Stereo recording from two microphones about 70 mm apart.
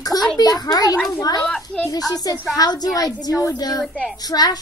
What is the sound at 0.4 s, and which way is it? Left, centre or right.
A woman's voice, left.